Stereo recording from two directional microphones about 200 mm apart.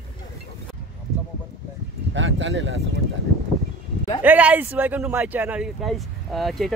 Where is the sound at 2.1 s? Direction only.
70° right (ahead or behind).